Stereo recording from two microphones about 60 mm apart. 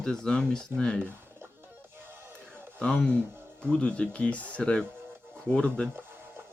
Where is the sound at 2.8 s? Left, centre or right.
Centre.